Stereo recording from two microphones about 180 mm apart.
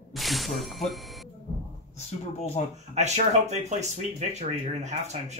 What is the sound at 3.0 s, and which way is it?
Speech, 40° right (ahead or behind).